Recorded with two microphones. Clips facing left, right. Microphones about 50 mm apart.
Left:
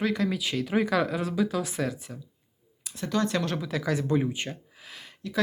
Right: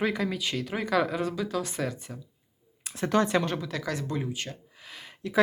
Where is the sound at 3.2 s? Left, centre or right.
Centre.